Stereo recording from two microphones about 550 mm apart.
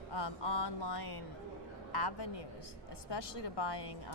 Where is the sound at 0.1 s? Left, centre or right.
Left.